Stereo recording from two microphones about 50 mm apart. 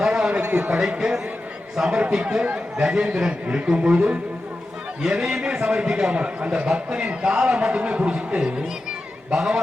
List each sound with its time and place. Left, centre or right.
0.0 s a sound: centre
0.5 s a man's voice: right
0.8 s a man's voice: centre
5.2 s a man's voice: centre